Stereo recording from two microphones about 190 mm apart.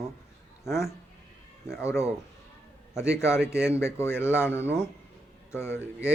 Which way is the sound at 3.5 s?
5° right (ahead or behind).